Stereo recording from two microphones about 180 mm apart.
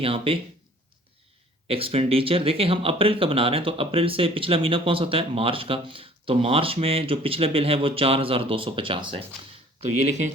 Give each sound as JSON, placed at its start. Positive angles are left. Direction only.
{"t": 0.0, "sound": "speech", "side_deg": -30}
{"t": 1.6, "sound": "speech", "side_deg": -30}
{"t": 10.0, "sound": "speech", "side_deg": -40}